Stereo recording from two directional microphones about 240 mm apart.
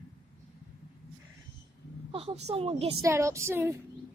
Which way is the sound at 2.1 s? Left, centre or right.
Right.